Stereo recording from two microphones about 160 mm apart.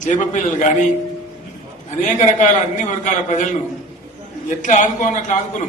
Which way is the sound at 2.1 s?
50° left (ahead or behind).